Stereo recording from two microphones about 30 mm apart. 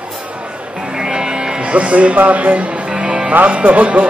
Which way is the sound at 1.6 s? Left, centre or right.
Right.